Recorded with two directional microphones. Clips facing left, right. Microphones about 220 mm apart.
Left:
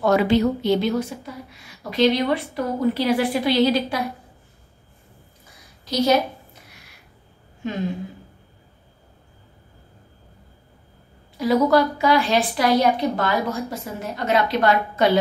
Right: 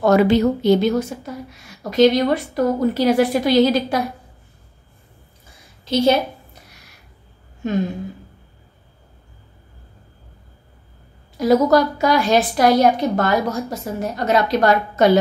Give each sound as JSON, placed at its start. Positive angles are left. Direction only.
{"t": 0.0, "sound": "a woman's voice", "side_deg": -45}
{"t": 5.9, "sound": "a woman's voice", "side_deg": -30}
{"t": 11.3, "sound": "a woman's voice", "side_deg": -45}